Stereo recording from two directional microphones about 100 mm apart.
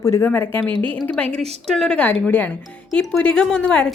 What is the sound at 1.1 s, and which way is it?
A woman's voice, 5° left (ahead or behind).